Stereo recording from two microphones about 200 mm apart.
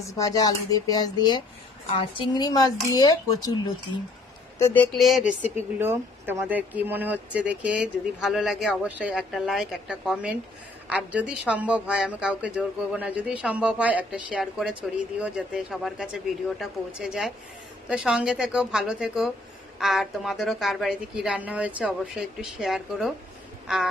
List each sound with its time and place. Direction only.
0.0 s speech: 15° left (ahead or behind)
4.6 s speech: 10° left (ahead or behind)